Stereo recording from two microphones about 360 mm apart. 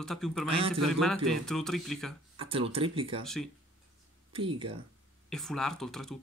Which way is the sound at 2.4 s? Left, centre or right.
Centre.